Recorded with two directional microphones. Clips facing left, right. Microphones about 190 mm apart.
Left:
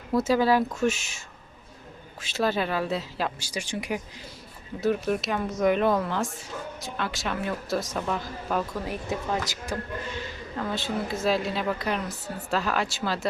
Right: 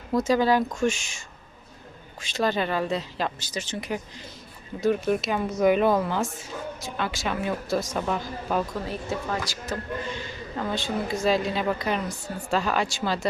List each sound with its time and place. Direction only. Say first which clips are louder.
0.1 s a woman's voice: even; 5° left (ahead or behind)
2.2 s a woman's voice: right 1 dB; 5° left (ahead or behind)
4.8 s a woman's voice: right 2 dB; centre (ahead or behind)
8.9 s a woman's voice: even; 15° left (ahead or behind)
10.6 s a woman's voice: right 1 dB; centre (ahead or behind)